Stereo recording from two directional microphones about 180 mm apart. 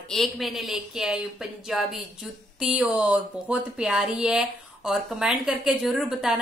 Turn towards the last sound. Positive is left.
turn(degrees=0)  # may be behind; listen again after turning